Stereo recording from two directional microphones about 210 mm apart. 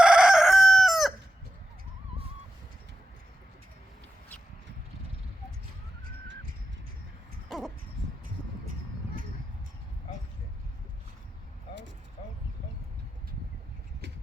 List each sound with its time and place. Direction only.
0.0 s chicken: 5° right (ahead or behind)
7.4 s crow: centre (ahead or behind)